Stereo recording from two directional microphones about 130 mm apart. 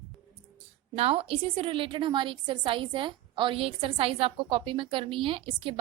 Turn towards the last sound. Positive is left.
turn(degrees=-45)  # may be behind; listen again after turning